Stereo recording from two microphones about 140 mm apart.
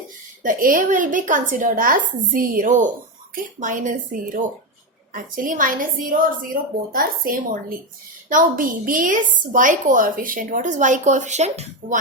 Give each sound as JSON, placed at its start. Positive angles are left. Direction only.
{"t": 0.4, "sound": "speech", "side_deg": -75}
{"t": 8.3, "sound": "speech", "side_deg": -75}